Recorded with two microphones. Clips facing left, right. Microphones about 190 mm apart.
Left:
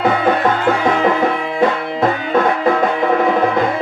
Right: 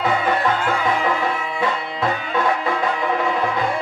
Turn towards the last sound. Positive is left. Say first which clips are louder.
# left 6 dB
turn(degrees=45)  # may be behind; listen again after turning